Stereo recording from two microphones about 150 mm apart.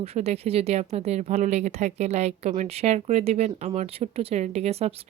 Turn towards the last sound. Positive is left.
turn(degrees=-45)  # may be behind; listen again after turning